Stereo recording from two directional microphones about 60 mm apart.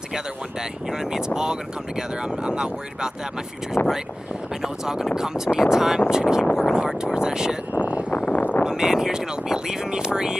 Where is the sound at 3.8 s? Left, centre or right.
Left.